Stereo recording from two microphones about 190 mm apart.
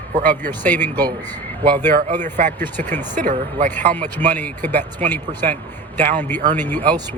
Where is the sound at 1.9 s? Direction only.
40° right (ahead or behind).